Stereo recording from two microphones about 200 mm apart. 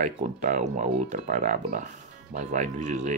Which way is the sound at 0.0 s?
40° right (ahead or behind).